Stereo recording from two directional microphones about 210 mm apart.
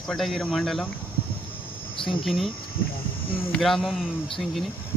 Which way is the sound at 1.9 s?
25° left (ahead or behind).